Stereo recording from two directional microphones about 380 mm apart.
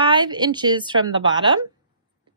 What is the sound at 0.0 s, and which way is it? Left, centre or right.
Speech, centre.